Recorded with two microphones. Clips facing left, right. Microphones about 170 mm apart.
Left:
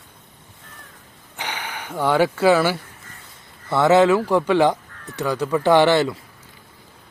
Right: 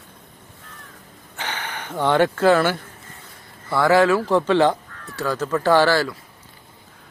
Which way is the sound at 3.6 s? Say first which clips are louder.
Left 2 dB; 20° left (ahead or behind).